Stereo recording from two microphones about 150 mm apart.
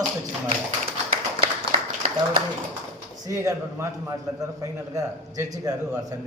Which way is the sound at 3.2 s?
20° right (ahead or behind).